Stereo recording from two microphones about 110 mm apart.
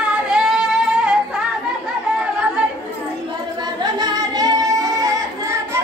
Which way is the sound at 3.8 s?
35° right (ahead or behind).